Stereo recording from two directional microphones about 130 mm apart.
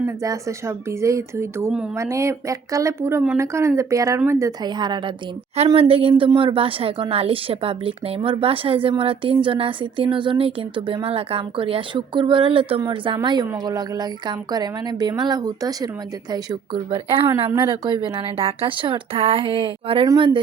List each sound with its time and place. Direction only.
0.2 s a woman's voice: 25° right (ahead or behind)